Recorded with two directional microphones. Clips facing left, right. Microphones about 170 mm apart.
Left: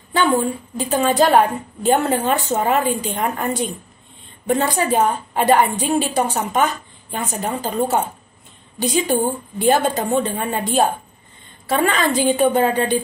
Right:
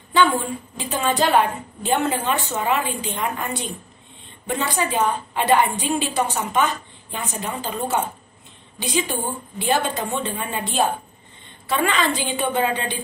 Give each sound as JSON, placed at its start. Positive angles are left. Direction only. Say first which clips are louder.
{"t": 0.1, "sound": "a woman's voice", "louder": "left 2 dB", "side_deg": 40}